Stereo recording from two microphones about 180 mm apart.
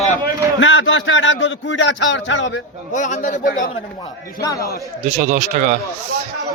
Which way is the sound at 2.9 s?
45° left (ahead or behind).